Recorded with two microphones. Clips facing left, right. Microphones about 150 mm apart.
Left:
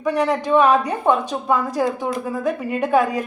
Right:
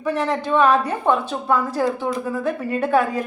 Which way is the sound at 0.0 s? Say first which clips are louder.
Left 2 dB; 15° left (ahead or behind).